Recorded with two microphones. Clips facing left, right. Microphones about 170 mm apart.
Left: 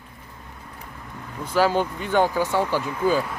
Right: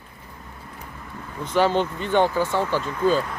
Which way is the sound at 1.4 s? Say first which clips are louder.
Even; 10° left (ahead or behind).